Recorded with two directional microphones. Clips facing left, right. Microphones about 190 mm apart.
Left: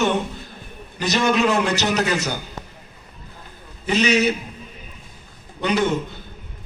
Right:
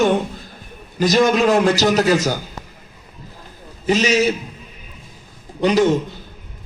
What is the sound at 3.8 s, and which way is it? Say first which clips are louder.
Speech: right 2 dB; 35° right (ahead or behind).